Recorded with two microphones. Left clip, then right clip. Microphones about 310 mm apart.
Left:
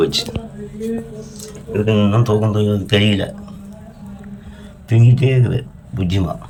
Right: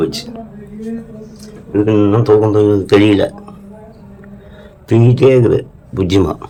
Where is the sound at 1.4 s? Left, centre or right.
Centre.